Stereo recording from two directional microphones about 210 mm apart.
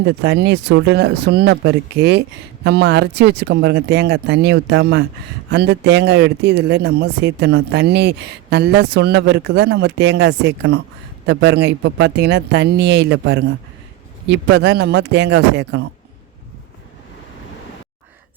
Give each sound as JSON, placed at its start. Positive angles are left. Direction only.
{"t": 0.0, "sound": "speech", "side_deg": -50}